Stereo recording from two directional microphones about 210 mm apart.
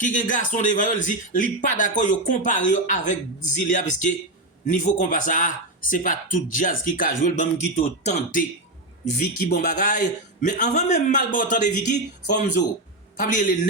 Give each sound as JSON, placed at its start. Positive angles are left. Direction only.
{"t": 0.0, "sound": "speech", "side_deg": 40}
{"t": 9.6, "sound": "speech", "side_deg": 40}